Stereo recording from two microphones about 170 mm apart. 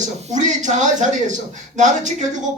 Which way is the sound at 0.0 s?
45° right (ahead or behind).